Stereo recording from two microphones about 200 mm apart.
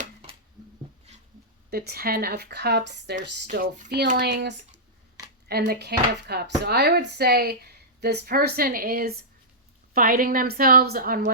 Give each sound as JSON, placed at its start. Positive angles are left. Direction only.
{"t": 1.7, "sound": "speech", "side_deg": -50}